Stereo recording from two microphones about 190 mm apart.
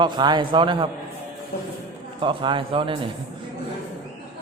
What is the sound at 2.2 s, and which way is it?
Speech, 25° right (ahead or behind).